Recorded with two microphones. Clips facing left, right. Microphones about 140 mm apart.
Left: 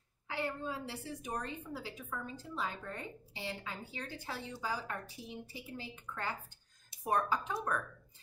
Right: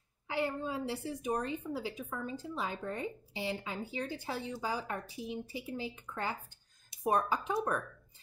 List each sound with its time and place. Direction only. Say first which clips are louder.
0.3 s speech: right 4 dB; 15° right (ahead or behind)